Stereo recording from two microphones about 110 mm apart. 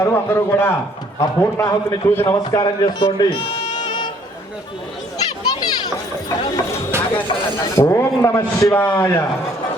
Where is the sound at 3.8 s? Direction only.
40° left (ahead or behind).